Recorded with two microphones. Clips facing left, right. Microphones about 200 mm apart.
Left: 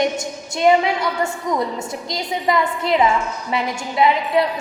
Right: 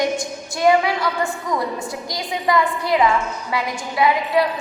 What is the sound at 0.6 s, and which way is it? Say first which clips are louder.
A woman's voice: left 1 dB; 20° left (ahead or behind).